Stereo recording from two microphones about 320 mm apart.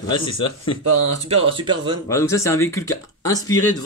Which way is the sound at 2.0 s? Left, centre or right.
Centre.